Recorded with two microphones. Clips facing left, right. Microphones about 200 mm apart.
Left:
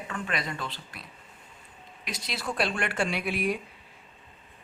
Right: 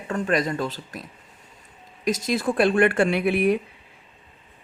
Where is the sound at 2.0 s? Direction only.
45° right (ahead or behind).